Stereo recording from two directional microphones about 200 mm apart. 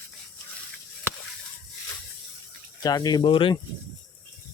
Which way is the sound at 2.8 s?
20° left (ahead or behind).